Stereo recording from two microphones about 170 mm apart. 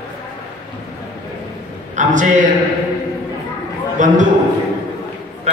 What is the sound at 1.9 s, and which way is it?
Speech, 45° right (ahead or behind).